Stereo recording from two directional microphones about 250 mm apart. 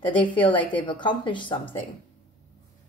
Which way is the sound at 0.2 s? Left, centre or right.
Centre.